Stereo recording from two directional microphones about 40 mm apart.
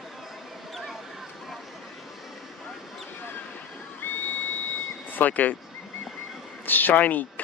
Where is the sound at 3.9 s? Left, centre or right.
Left.